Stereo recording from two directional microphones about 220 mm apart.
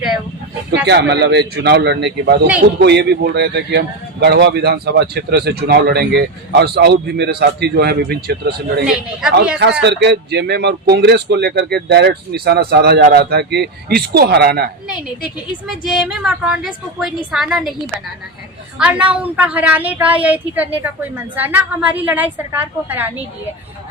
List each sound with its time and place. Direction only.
0.9 s speech: 50° right (ahead or behind)
9.8 s speech: 50° right (ahead or behind)
15.6 s speech: centre (ahead or behind)
18.8 s a woman's voice: 5° right (ahead or behind)